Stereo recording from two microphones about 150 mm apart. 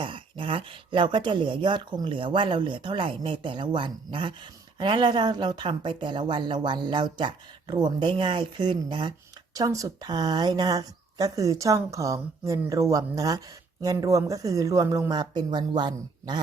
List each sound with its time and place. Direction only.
0.0 s speech: 35° right (ahead or behind)